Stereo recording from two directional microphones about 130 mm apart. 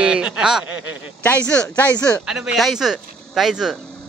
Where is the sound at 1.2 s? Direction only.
10° left (ahead or behind).